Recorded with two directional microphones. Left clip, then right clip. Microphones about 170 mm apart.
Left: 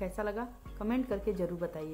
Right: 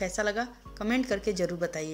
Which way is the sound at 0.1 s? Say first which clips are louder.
Right 7 dB; 15° right (ahead or behind).